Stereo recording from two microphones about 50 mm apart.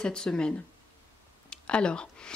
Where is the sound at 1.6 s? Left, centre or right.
Centre.